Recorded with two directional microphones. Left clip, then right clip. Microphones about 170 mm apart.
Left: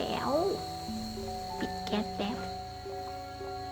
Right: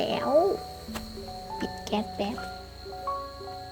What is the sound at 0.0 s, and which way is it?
Music, 20° right (ahead or behind).